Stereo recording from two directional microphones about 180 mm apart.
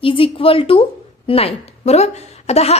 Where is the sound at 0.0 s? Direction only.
30° left (ahead or behind).